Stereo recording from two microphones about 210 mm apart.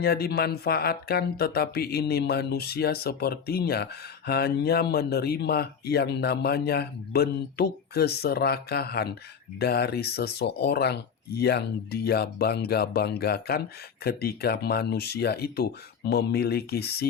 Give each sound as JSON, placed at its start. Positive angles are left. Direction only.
{"t": 0.0, "sound": "speech", "side_deg": 45}